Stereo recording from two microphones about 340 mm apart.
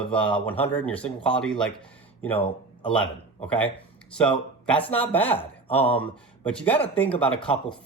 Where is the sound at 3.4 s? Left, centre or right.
Centre.